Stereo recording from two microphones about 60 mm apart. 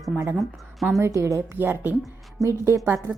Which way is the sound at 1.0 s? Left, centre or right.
Right.